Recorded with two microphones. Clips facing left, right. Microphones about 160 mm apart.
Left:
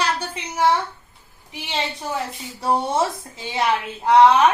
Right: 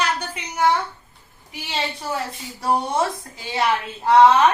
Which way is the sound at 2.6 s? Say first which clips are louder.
Left 1 dB; 25° left (ahead or behind).